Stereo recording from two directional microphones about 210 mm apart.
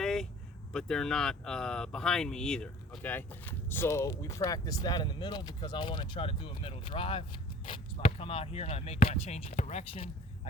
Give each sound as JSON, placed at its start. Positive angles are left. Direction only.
{"t": 0.0, "sound": "vehicle", "side_deg": 0}
{"t": 0.7, "sound": "speech", "side_deg": 5}